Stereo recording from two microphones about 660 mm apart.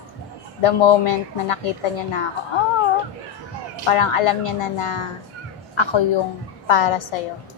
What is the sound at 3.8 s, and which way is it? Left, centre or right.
Speech, left.